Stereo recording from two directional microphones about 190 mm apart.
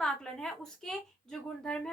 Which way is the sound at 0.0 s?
5° left (ahead or behind).